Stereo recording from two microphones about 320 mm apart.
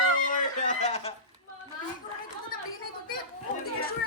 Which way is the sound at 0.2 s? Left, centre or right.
Left.